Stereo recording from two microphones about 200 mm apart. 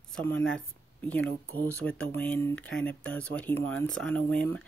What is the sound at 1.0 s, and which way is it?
Speech, 5° left (ahead or behind).